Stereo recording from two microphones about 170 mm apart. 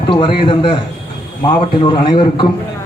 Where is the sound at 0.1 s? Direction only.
30° left (ahead or behind).